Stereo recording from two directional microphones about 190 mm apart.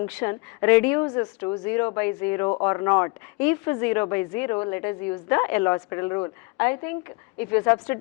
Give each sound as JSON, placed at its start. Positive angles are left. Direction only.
{"t": 0.0, "sound": "a woman's voice", "side_deg": 10}